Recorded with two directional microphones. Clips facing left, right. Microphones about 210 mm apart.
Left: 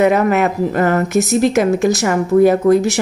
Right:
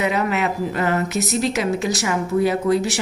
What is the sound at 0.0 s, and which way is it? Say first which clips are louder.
A woman's voice: left 8 dB; 50° left (ahead or behind).